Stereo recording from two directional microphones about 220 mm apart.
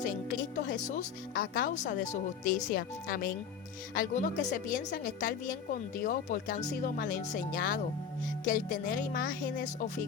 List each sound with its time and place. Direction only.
0.5 s speech: 35° left (ahead or behind)